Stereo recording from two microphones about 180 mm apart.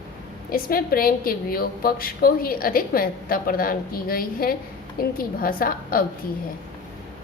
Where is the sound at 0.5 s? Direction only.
55° left (ahead or behind).